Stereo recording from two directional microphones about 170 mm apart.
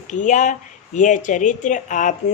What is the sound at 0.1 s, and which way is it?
Speech, 45° left (ahead or behind).